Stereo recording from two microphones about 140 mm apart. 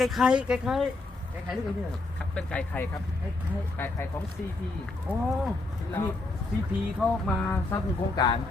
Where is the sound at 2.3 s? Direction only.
5° left (ahead or behind).